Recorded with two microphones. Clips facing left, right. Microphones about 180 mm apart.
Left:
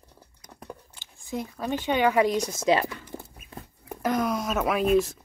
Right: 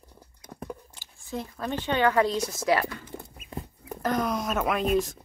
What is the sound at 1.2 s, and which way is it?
Speech, 15° left (ahead or behind).